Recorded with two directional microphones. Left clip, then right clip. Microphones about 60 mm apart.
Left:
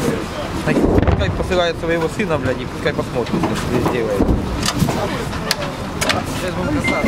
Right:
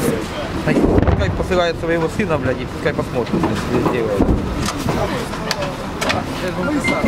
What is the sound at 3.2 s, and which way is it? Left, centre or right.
Speech, left.